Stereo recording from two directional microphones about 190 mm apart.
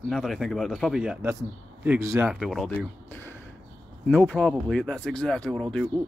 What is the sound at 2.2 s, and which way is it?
Speech, centre (ahead or behind).